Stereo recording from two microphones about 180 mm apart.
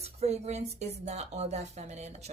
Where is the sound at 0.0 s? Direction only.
35° right (ahead or behind).